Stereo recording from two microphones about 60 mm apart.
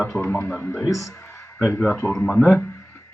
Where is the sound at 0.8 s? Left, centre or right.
Left.